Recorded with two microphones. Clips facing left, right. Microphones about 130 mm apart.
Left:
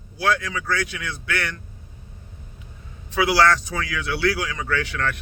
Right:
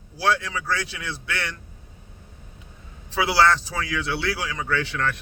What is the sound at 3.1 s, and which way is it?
A man's voice, 25° right (ahead or behind).